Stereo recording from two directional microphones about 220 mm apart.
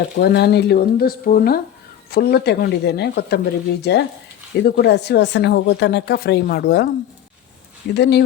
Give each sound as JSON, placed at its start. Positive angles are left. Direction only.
{"t": 0.2, "sound": "speech", "side_deg": 50}
{"t": 7.9, "sound": "speech", "side_deg": 50}